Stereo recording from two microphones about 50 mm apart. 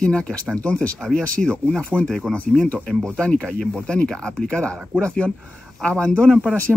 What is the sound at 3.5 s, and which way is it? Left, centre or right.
Speech, centre.